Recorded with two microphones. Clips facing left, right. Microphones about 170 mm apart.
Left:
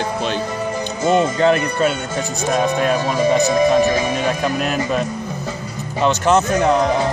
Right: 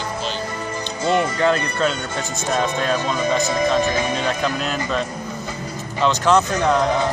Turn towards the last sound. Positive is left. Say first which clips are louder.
# left 1 dB
turn(degrees=15)  # may be behind; listen again after turning